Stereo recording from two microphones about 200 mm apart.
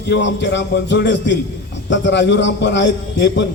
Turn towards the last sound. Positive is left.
turn(degrees=60)  # may be behind; listen again after turning